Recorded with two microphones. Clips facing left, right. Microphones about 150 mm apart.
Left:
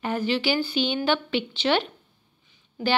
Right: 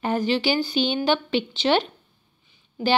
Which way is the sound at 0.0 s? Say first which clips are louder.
Right 3 dB; 35° right (ahead or behind).